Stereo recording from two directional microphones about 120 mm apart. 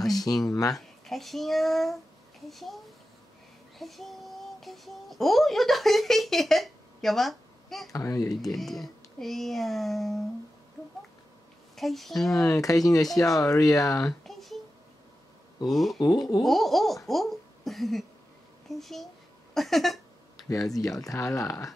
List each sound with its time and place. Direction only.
0.1 s a sound: 30° left (ahead or behind)
0.7 s a child's voice: centre (ahead or behind)
7.9 s speech: 25° left (ahead or behind)
8.3 s speech: centre (ahead or behind)
11.7 s speech: centre (ahead or behind)
12.4 s speech: 30° left (ahead or behind)
14.2 s a sound: centre (ahead or behind)
15.7 s speech: centre (ahead or behind)
20.3 s a sound: 30° left (ahead or behind)
21.1 s speech: 25° left (ahead or behind)